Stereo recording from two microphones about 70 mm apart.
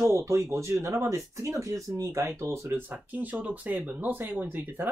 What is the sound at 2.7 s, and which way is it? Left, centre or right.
Speech, right.